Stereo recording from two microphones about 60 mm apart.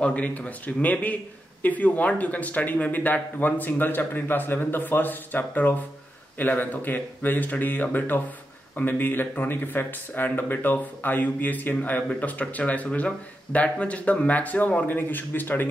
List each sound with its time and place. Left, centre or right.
0.0 s speech: left